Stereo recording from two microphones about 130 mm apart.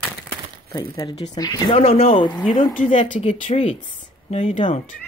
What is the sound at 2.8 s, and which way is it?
Speech, 80° left.